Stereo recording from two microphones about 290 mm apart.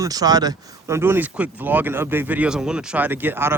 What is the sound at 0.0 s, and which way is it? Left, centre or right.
Speech, centre.